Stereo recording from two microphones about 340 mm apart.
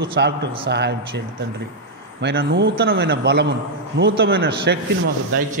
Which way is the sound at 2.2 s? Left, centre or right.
Right.